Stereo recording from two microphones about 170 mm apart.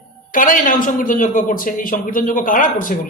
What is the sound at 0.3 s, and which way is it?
Speech, 55° left (ahead or behind).